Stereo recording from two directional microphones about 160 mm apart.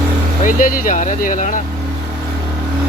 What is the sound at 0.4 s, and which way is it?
Speech, 60° left (ahead or behind).